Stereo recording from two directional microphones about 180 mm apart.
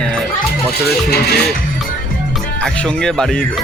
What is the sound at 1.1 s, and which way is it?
Music, 65° left (ahead or behind).